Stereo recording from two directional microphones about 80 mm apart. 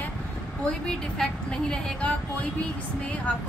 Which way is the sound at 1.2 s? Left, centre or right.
Centre.